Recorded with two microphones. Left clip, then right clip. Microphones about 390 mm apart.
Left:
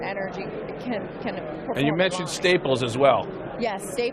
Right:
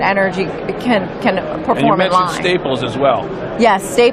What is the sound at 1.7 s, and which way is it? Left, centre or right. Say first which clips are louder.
Speech: right 11 dB; left.